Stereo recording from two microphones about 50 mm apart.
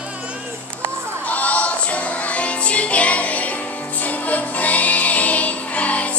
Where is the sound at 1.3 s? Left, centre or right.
Left.